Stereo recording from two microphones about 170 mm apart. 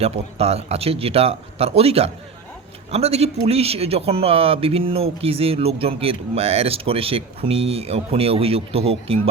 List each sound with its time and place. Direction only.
0.0 s speech: 35° right (ahead or behind)